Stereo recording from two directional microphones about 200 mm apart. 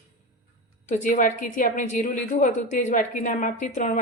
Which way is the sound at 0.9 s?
40° left (ahead or behind).